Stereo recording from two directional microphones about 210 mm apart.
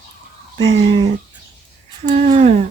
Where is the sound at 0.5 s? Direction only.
30° right (ahead or behind).